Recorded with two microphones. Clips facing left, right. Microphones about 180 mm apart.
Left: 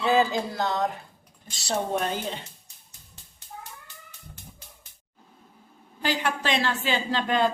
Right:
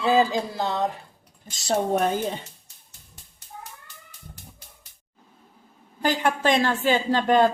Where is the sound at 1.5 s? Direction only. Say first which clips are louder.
Right 4 dB; 45° right (ahead or behind).